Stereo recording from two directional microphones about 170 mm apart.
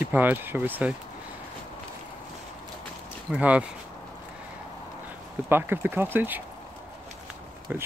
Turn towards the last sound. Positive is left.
turn(degrees=-10)  # may be behind; listen again after turning